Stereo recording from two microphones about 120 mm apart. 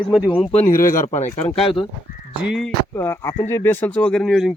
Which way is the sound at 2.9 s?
20° left (ahead or behind).